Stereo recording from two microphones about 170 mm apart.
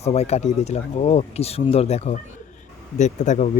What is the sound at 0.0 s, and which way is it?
Speech, 40° left (ahead or behind).